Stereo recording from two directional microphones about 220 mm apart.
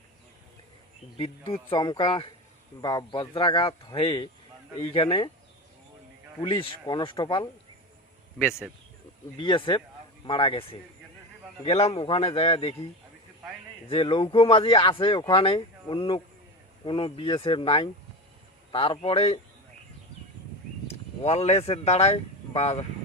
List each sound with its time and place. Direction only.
1.1 s speech: 25° left (ahead or behind)
6.4 s speech: 25° left (ahead or behind)
9.4 s speech: 20° left (ahead or behind)
13.8 s speech: 25° left (ahead or behind)
20.8 s speech: 30° left (ahead or behind)